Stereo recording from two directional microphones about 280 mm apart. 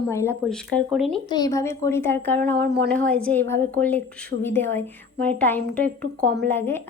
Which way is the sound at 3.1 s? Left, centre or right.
Centre.